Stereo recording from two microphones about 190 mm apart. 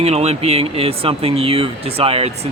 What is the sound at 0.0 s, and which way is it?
Speech, 35° right (ahead or behind).